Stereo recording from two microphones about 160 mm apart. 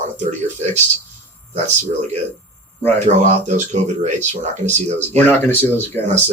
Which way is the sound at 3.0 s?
50° right (ahead or behind).